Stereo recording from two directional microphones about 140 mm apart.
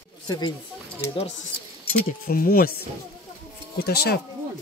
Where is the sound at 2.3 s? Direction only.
90° left.